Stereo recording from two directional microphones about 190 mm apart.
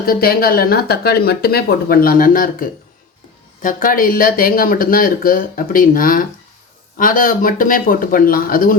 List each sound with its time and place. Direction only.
0.0 s speech: 50° left (ahead or behind)